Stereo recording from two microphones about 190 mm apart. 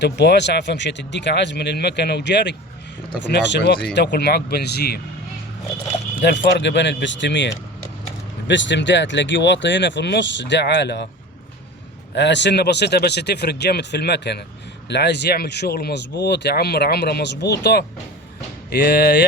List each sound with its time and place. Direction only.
0.0 s speech: 65° left (ahead or behind)
6.4 s speech: 65° left (ahead or behind)
12.1 s speech: 65° left (ahead or behind)